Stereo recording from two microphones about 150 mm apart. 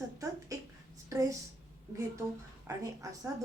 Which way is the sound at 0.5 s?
20° right (ahead or behind).